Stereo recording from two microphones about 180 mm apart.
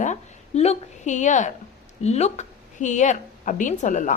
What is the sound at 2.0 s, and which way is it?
A woman's voice, 40° left (ahead or behind).